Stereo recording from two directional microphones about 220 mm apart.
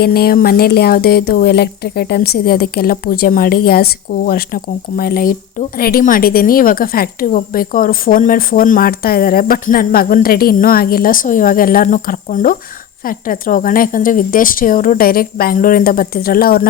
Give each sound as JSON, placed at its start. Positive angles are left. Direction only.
{"t": 0.0, "sound": "a woman's voice", "side_deg": 45}